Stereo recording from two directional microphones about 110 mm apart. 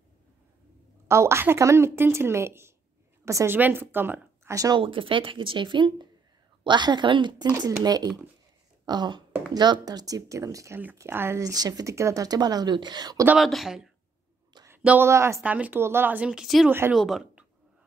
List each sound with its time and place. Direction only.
1.0 s a woman's voice: 25° right (ahead or behind)
3.5 s speech: 15° right (ahead or behind)
4.6 s speech: 35° right (ahead or behind)
4.8 s speech: 55° right (ahead or behind); by 8.1 s 35° right (ahead or behind)
8.8 s a sound: 40° right (ahead or behind)
9.5 s speech: 40° right (ahead or behind)
13.4 s speech: centre (ahead or behind)
15.0 s a woman's voice: 25° right (ahead or behind)
15.4 s speech: 15° right (ahead or behind)
16.6 s a woman's voice: 20° right (ahead or behind)
16.9 s speech: centre (ahead or behind)